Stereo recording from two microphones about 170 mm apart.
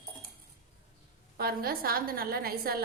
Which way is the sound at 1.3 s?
65° right (ahead or behind).